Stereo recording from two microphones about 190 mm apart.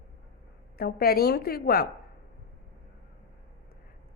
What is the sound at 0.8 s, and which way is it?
A woman's voice, 55° left (ahead or behind).